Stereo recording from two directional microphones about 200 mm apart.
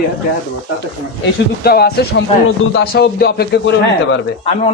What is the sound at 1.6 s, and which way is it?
A man's voice, 50° left (ahead or behind).